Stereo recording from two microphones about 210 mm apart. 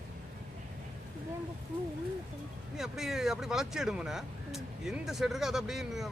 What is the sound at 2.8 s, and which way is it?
Speech, centre (ahead or behind).